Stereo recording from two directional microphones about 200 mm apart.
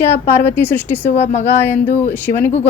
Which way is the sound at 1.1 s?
35° left (ahead or behind).